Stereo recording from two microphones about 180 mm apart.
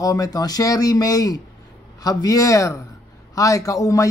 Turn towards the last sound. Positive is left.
turn(degrees=20)  # may be behind; listen again after turning